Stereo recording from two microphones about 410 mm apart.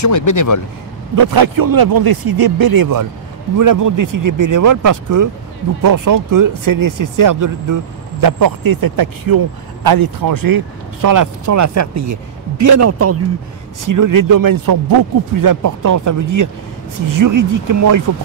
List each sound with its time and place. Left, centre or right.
0.0 s speech: left
1.1 s a man's voice: right
13.8 s speech: right